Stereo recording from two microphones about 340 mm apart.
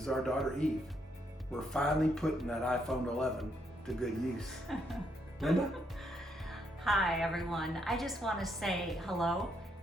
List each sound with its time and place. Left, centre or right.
0.0 s speech: centre
1.7 s speech: centre